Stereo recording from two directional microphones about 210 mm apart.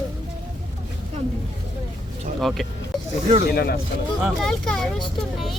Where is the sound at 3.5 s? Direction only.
45° left (ahead or behind).